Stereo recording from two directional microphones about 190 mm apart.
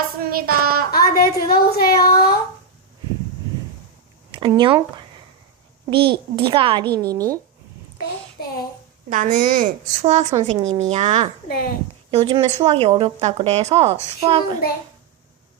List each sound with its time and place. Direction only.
0.2 s child singing: 50° right (ahead or behind)
0.9 s a sound: 50° left (ahead or behind)
1.5 s speech: 55° left (ahead or behind)
4.3 s speech: 25° right (ahead or behind)
5.9 s a child's voice: 25° right (ahead or behind)
8.4 s speech: 55° left (ahead or behind)
9.0 s speech: 40° right (ahead or behind)
11.4 s speech: 50° left (ahead or behind)
12.1 s speech: 30° right (ahead or behind)
14.6 s a child's voice: 55° left (ahead or behind)